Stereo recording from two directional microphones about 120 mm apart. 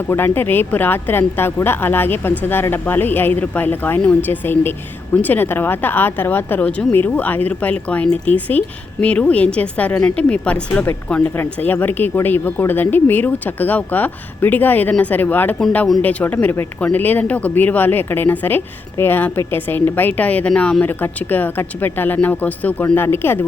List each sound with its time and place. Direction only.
0.3 s speech: 15° left (ahead or behind)